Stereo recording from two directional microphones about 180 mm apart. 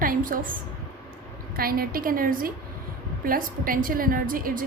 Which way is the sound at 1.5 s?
55° right (ahead or behind).